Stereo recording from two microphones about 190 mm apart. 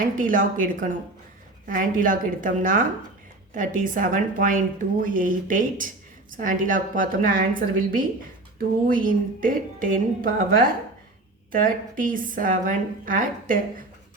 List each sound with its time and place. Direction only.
0.0 s a woman's voice: 45° right (ahead or behind)